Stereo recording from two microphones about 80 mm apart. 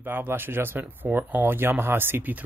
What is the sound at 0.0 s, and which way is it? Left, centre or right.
Speech, right.